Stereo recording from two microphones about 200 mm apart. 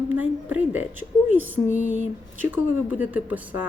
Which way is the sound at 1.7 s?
40° left (ahead or behind).